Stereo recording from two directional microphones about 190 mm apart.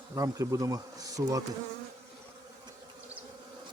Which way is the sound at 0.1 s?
15° right (ahead or behind).